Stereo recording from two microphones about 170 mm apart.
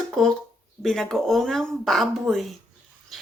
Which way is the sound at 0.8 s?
5° left (ahead or behind).